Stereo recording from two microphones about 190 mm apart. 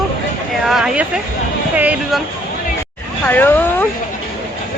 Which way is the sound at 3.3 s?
10° left (ahead or behind).